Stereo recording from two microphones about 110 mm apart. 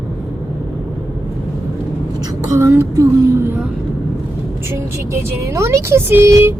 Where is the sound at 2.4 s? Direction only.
25° right (ahead or behind).